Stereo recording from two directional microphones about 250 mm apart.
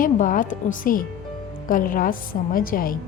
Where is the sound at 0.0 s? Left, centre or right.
Left.